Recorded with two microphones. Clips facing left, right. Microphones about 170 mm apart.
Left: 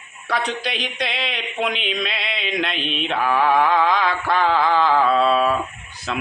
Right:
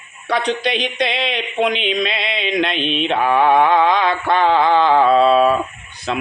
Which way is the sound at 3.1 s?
25° right (ahead or behind).